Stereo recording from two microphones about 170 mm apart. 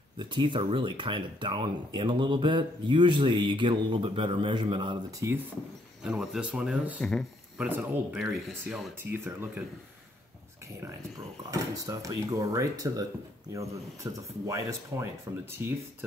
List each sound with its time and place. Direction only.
0.2 s speech: 25° right (ahead or behind)
5.2 s speech: 15° right (ahead or behind)
6.0 s speech: 5° right (ahead or behind)
7.5 s speech: 10° right (ahead or behind)
9.1 s speech: 15° right (ahead or behind)
11.5 s speech: 20° right (ahead or behind)